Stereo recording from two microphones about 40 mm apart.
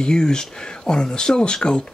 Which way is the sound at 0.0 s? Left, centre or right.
Centre.